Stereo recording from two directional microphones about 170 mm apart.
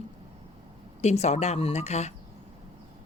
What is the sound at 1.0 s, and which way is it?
A woman's voice, 40° left (ahead or behind).